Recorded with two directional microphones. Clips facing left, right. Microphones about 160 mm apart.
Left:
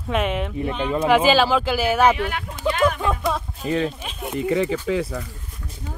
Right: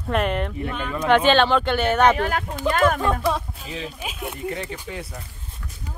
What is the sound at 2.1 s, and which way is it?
Speech, 40° right (ahead or behind).